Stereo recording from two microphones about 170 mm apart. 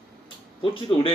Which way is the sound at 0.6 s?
30° left (ahead or behind).